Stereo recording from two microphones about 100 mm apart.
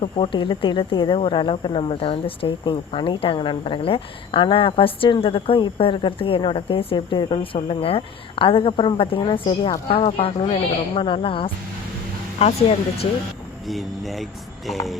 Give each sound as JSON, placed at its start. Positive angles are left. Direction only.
{"t": 0.0, "sound": "speech", "side_deg": 60}
{"t": 9.9, "sound": "speech", "side_deg": 75}
{"t": 12.4, "sound": "speech", "side_deg": 90}
{"t": 13.7, "sound": "speech", "side_deg": 0}